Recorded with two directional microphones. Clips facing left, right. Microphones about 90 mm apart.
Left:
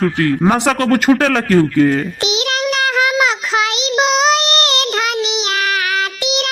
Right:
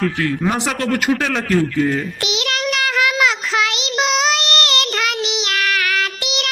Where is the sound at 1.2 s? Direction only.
60° left (ahead or behind).